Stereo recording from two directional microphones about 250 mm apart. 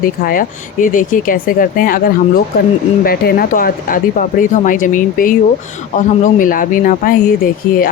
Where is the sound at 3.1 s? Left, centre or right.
Left.